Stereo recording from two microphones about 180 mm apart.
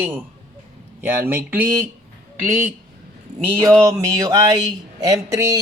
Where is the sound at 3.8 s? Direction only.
20° right (ahead or behind).